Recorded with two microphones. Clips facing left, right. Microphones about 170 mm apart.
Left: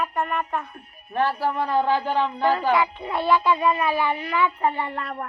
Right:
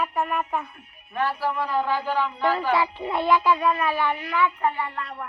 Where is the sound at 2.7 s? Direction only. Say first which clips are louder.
Left 1 dB; 30° right (ahead or behind).